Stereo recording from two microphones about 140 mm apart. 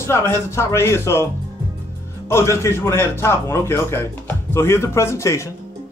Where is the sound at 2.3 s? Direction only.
20° left (ahead or behind).